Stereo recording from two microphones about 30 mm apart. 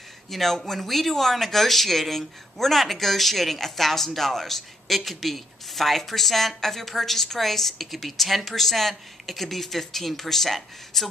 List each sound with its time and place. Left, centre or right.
0.3 s speech: centre